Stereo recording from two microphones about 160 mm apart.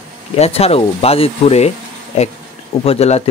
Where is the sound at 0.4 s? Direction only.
40° left (ahead or behind).